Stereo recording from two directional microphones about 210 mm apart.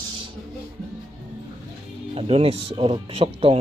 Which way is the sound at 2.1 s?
25° right (ahead or behind).